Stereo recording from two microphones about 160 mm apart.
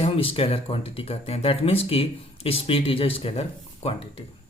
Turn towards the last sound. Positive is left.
turn(degrees=40)  # may be behind; listen again after turning